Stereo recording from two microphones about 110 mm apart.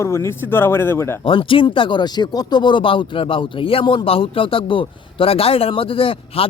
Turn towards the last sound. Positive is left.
turn(degrees=60)  # may be behind; listen again after turning